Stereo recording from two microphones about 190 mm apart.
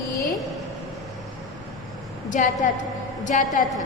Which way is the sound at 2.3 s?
40° left (ahead or behind).